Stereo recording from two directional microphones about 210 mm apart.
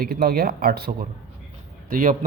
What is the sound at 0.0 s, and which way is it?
A man's voice, 50° right (ahead or behind).